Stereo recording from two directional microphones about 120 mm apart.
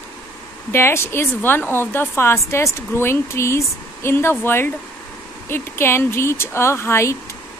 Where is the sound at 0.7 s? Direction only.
20° left (ahead or behind).